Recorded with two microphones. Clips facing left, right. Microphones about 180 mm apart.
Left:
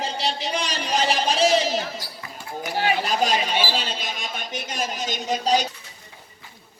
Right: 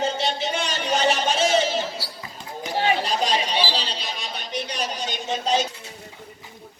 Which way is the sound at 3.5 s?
50° left (ahead or behind).